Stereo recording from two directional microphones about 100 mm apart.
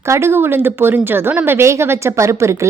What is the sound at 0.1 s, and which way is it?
A woman's voice, 25° right (ahead or behind).